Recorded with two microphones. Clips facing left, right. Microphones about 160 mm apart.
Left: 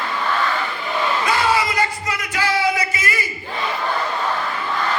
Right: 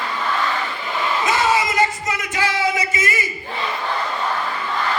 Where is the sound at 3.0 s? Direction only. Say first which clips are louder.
Right 2 dB; 25° right (ahead or behind).